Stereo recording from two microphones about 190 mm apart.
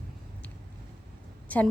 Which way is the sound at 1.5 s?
10° left (ahead or behind).